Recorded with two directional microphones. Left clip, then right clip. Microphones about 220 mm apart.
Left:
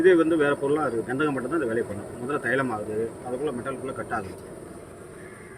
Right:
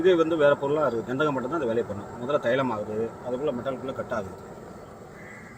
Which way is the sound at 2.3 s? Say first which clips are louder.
Right 1 dB; 35° left (ahead or behind).